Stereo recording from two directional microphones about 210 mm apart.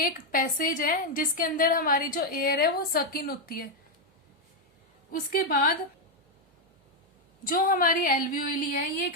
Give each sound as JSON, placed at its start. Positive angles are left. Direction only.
{"t": 0.0, "sound": "a woman's voice", "side_deg": 40}
{"t": 5.3, "sound": "a woman's voice", "side_deg": 45}
{"t": 7.4, "sound": "a woman's voice", "side_deg": 40}